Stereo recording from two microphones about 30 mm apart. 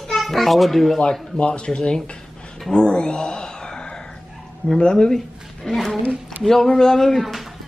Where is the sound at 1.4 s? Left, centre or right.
Left.